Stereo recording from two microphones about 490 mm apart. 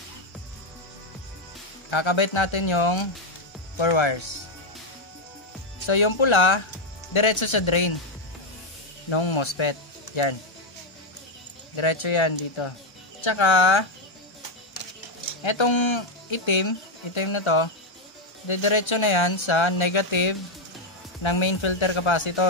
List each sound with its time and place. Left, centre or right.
1.9 s speech: left
5.9 s speech: left
9.1 s speech: left
11.7 s speech: left
15.4 s speech: left